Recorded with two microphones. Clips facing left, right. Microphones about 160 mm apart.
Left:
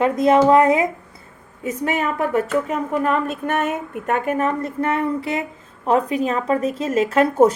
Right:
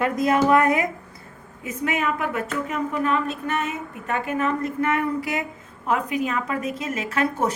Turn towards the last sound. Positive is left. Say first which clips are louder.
# left 9 dB
turn(degrees=40)  # may be behind; listen again after turning